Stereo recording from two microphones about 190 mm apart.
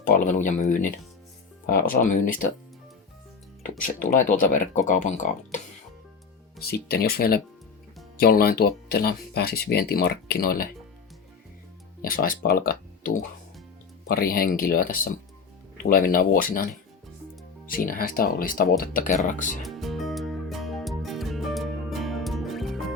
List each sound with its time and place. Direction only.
0.0 s speech: 40° left (ahead or behind)
3.8 s speech: 45° left (ahead or behind)
6.6 s speech: 55° left (ahead or behind)
12.0 s speech: 50° left (ahead or behind)
17.7 s speech: 50° left (ahead or behind)
19.6 s music: centre (ahead or behind)